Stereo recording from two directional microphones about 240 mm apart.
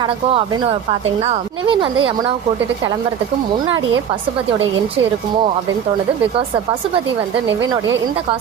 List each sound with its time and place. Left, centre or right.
0.0 s speech: centre
7.7 s a woman's voice: centre